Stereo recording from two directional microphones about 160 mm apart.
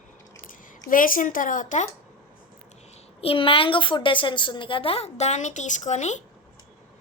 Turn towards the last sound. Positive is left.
turn(degrees=45)  # may be behind; listen again after turning